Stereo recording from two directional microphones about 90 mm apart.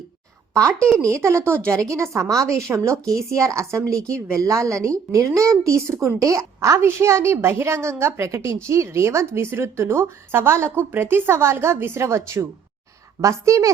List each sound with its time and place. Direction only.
0.9 s a woman's voice: 30° right (ahead or behind)